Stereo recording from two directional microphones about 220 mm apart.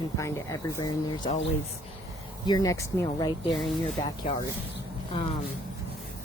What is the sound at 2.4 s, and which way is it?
Speech, 15° left (ahead or behind).